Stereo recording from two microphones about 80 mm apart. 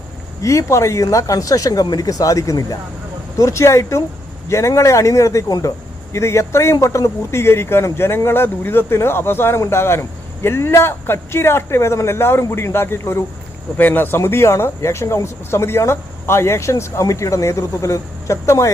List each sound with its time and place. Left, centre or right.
0.4 s speech: left
5.5 s speech: left
6.1 s speech: left